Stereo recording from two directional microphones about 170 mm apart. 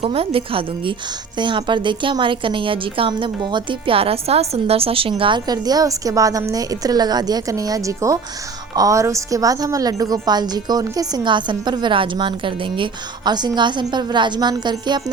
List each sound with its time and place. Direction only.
0.0 s a woman's voice: 35° right (ahead or behind)